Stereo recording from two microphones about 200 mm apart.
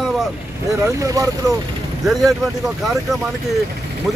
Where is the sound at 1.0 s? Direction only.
15° right (ahead or behind).